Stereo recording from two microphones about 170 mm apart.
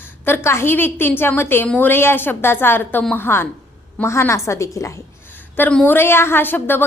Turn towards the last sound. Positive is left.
turn(degrees=10)  # may be behind; listen again after turning